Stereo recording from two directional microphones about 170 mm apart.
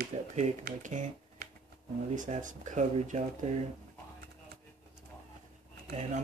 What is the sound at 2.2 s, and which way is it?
Speech, 50° right (ahead or behind).